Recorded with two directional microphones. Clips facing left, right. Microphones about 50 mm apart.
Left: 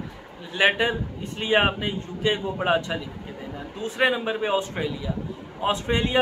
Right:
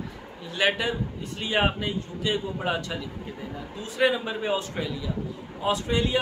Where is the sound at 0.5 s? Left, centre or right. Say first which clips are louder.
Left 4 dB; left.